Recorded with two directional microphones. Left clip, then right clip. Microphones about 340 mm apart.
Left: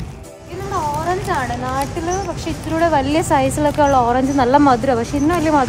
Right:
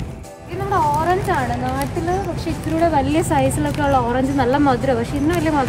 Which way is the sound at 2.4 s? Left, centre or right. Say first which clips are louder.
Left 2 dB; centre.